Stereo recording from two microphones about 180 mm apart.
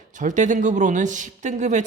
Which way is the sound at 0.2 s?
45° right (ahead or behind).